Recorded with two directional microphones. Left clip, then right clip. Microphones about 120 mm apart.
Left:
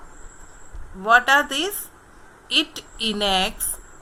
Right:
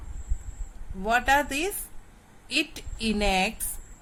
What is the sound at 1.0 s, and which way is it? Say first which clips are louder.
A woman's voice: left 7 dB; 35° right (ahead or behind).